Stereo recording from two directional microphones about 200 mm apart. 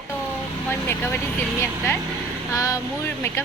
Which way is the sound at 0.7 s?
10° left (ahead or behind).